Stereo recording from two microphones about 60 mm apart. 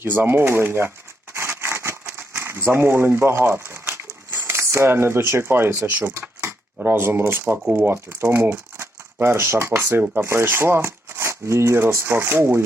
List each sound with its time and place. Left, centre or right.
0.0 s a sound: right
4.6 s speech: right
7.9 s speech: right